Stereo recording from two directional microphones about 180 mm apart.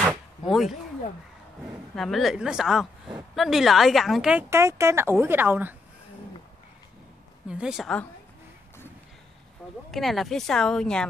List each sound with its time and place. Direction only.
0.0 s a sound: centre (ahead or behind)
2.0 s speech: centre (ahead or behind)
7.4 s speech: 5° right (ahead or behind)
9.8 s speech: centre (ahead or behind)